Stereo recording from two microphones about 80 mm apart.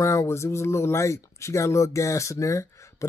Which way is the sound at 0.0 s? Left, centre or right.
Left.